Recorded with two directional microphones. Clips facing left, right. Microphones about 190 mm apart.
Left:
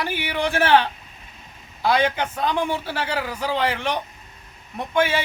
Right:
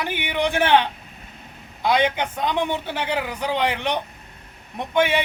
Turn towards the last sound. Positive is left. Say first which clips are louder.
# right 1 dB
turn(degrees=-20)  # may be behind; listen again after turning